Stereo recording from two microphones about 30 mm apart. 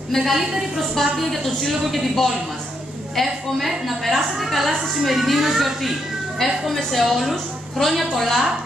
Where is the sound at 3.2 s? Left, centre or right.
Centre.